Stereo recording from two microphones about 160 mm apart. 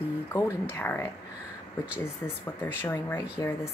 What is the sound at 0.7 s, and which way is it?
Speech, 15° left (ahead or behind).